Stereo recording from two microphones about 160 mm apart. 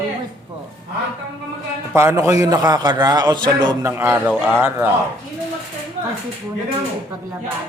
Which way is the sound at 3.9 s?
15° right (ahead or behind).